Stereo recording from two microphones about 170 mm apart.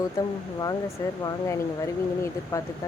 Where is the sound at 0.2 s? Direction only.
20° left (ahead or behind).